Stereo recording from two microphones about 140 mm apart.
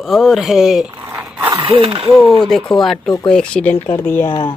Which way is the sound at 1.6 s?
40° right (ahead or behind).